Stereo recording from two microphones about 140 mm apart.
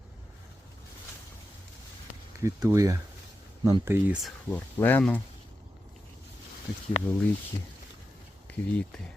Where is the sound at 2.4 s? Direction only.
20° right (ahead or behind).